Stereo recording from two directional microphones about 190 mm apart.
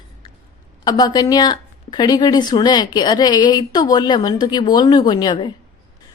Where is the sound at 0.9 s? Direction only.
20° left (ahead or behind).